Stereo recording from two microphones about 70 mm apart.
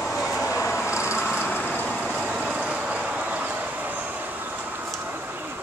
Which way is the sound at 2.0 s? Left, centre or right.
Centre.